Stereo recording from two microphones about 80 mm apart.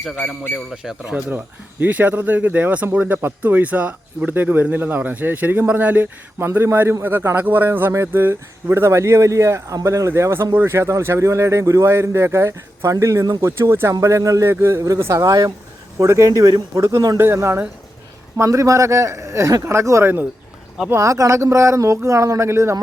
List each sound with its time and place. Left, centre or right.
0.2 s a man's voice: centre
0.7 s speech: centre
1.8 s speech: right
14.5 s speech: right
16.8 s speech: right